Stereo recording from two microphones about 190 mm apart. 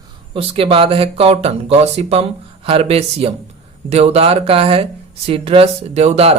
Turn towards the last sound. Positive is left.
turn(degrees=-35)  # may be behind; listen again after turning